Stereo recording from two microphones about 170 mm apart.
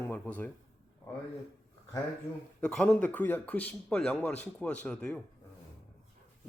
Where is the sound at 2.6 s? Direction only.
5° left (ahead or behind).